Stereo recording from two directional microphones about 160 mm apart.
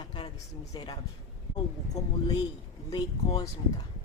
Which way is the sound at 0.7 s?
30° left (ahead or behind).